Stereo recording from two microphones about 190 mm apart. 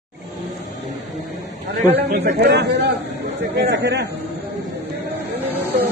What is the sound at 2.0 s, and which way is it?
A man's voice, 60° right (ahead or behind).